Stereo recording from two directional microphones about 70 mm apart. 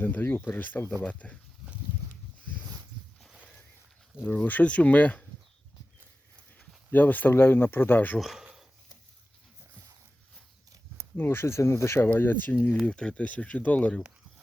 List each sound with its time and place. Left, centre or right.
0.0 s speech: left
4.4 s speech: left
6.9 s speech: left
8.2 s speech: centre
11.2 s speech: left
12.1 s speech: left
12.8 s speech: centre